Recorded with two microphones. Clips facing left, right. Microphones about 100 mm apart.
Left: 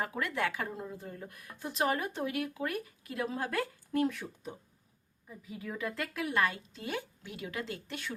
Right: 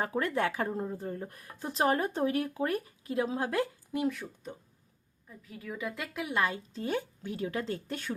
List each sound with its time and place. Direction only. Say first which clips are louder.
0.0 s speech: right 4 dB; 35° right (ahead or behind)
3.9 s speech: left 1 dB; 5° right (ahead or behind)
5.9 s a woman's voice: left 1 dB; 15° right (ahead or behind)
6.5 s speech: right 5 dB; 35° right (ahead or behind)